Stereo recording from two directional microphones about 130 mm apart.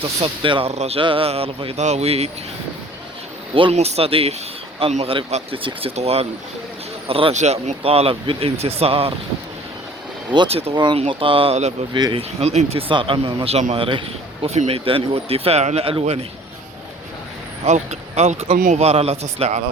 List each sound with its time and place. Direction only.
0.0 s speech: 40° right (ahead or behind)
0.7 s speech: 55° right (ahead or behind)
3.5 s speech: 45° right (ahead or behind)
7.3 s speech: 55° right (ahead or behind)
10.5 s speech: 50° right (ahead or behind)
10.8 s speech: 35° right (ahead or behind); by 12.8 s 55° right (ahead or behind)
12.9 s speech: 40° right (ahead or behind)
17.7 s speech: 60° right (ahead or behind)
18.5 s a man's voice: 90° right
18.8 s speech: 50° right (ahead or behind)